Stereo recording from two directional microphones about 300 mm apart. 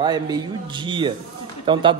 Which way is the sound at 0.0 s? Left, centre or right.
Centre.